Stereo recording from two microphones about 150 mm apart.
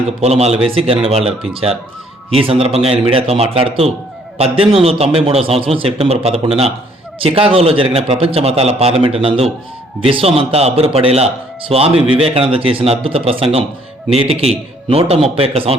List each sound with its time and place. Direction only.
0.2 s a man's voice: 45° right (ahead or behind)
2.3 s a man's voice: 40° right (ahead or behind)